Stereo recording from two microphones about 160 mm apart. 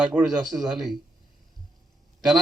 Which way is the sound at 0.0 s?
10° right (ahead or behind).